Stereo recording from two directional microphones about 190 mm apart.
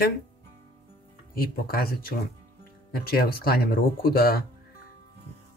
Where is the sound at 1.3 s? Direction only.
50° left (ahead or behind).